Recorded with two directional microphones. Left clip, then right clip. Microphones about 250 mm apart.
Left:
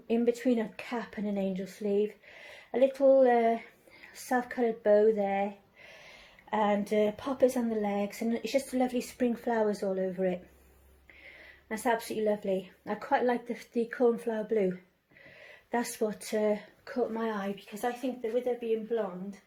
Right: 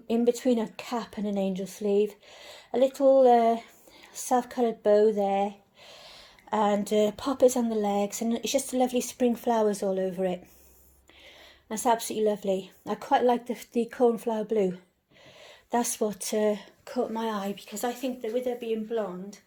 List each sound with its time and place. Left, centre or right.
0.1 s a woman's voice: right
6.5 s a woman's voice: right
11.7 s a woman's voice: right
15.7 s a woman's voice: right